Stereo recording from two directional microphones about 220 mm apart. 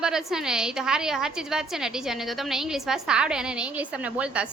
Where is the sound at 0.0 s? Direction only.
Centre (ahead or behind).